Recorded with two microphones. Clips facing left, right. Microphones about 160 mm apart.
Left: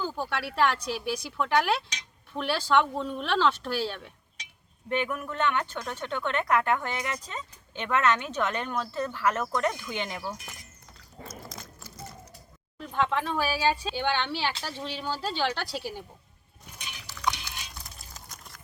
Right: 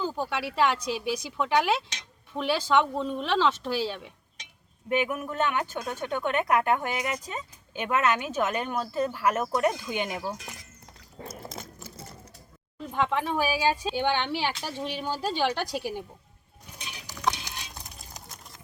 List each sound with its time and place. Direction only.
0.0 s speech: centre (ahead or behind); by 10.5 s 20° right (ahead or behind)
11.3 s biting: 25° right (ahead or behind)
12.8 s speech: 10° right (ahead or behind)
17.4 s a sound: 15° right (ahead or behind)